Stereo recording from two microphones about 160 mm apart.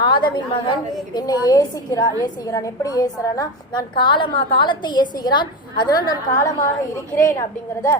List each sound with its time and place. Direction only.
0.0 s a woman's voice: 30° left (ahead or behind)